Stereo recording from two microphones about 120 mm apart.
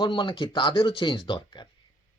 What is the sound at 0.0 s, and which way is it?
Speech, 40° left (ahead or behind).